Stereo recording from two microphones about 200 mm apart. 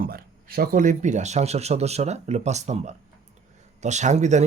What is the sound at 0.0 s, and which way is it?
A man's voice, 45° right (ahead or behind).